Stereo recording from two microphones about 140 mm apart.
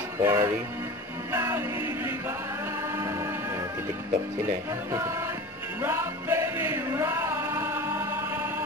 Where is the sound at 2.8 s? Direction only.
20° right (ahead or behind).